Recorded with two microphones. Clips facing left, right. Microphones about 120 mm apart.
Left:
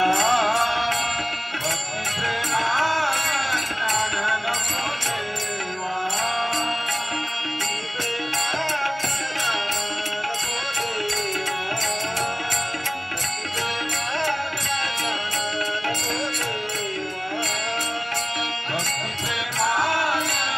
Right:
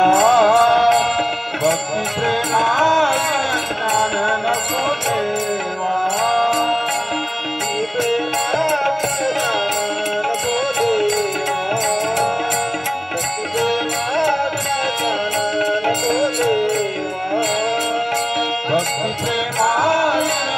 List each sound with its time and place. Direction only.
0.0 s music: 50° right (ahead or behind)
2.2 s music: 50° right (ahead or behind)
6.2 s music: 50° right (ahead or behind)
10.8 s music: 55° right (ahead or behind)
16.1 s music: 50° right (ahead or behind)
19.6 s music: 45° right (ahead or behind)